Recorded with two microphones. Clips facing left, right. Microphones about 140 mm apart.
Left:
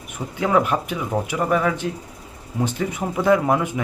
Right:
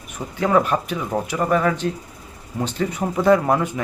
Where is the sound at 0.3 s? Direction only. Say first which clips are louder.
Right 1 dB; 15° left (ahead or behind).